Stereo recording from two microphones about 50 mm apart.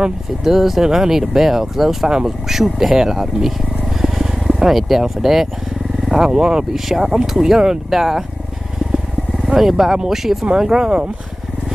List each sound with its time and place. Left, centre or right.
0.0 s speech: centre
4.0 s vehicle: centre
6.0 s speech: centre
8.9 s vehicle: centre
10.4 s speech: centre